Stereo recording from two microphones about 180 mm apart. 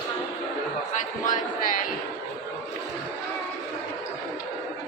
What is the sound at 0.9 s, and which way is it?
Speech, 45° left (ahead or behind).